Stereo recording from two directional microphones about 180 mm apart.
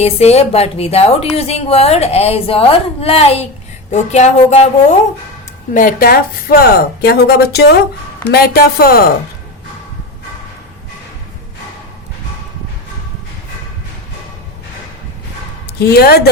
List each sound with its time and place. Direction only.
0.0 s a woman's voice: 35° left (ahead or behind)
5.7 s speech: 50° left (ahead or behind)
15.8 s speech: 60° left (ahead or behind)